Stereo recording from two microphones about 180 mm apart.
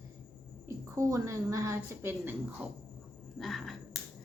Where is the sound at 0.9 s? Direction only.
15° right (ahead or behind).